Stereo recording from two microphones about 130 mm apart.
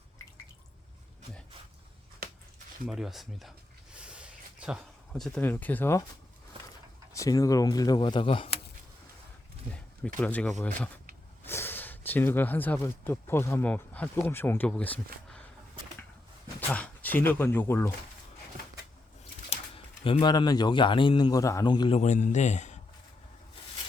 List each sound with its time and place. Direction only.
2.8 s speech: 5° right (ahead or behind)
3.9 s a sound: 10° right (ahead or behind)
5.1 s speech: 5° left (ahead or behind)
5.4 s speech: 15° left (ahead or behind)
7.1 s speech: 25° left (ahead or behind); by 8.4 s 40° left (ahead or behind)
9.7 s speech: 10° left (ahead or behind)
16.6 s speech: 10° left (ahead or behind)
19.5 s speech: 45° left (ahead or behind)
21.9 s a man's voice: 65° left (ahead or behind)